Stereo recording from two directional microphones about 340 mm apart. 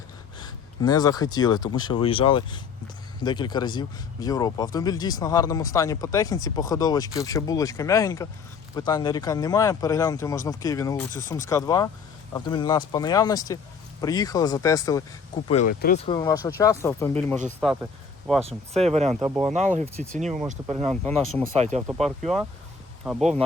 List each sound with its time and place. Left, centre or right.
0.3 s speech: centre
15.5 s speech: left
16.0 s speech: centre
18.4 s speech: centre
19.1 s speech: centre
19.5 s speech: right
20.9 s speech: centre
21.6 s speech: centre